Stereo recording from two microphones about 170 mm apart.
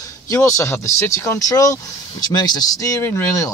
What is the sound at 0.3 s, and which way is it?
Speech, 15° left (ahead or behind).